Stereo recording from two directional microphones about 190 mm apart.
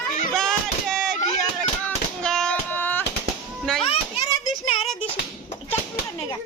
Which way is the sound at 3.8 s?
30° left (ahead or behind).